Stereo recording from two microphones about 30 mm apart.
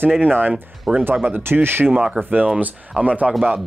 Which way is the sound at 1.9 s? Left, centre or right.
Right.